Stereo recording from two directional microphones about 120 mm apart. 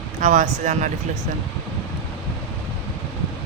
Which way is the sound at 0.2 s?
90° right.